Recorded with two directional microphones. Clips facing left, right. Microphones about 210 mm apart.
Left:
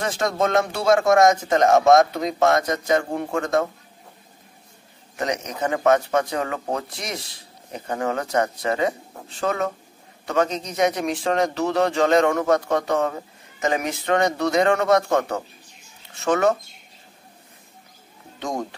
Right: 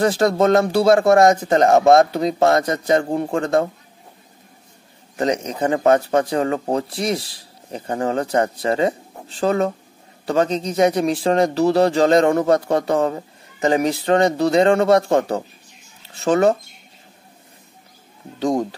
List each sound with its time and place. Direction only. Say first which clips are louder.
0.0 s speech: right 7 dB; 35° right (ahead or behind)
5.1 s speech: right 5 dB; 30° right (ahead or behind)
18.4 s speech: right 8 dB; 35° right (ahead or behind)